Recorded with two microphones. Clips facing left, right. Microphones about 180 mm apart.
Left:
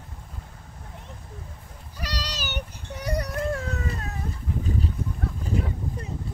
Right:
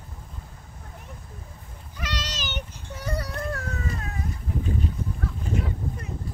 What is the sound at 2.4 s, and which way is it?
Child singing, 15° left (ahead or behind).